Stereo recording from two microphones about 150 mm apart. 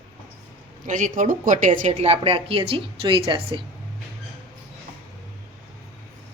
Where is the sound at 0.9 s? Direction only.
55° right (ahead or behind); by 3.6 s 35° right (ahead or behind).